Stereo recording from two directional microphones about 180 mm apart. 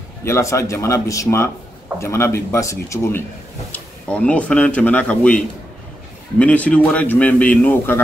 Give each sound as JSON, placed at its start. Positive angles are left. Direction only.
{"t": 0.2, "sound": "speech", "side_deg": 15}
{"t": 6.4, "sound": "speech", "side_deg": 5}